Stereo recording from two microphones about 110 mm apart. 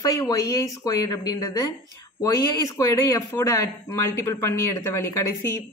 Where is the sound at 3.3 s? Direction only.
20° left (ahead or behind).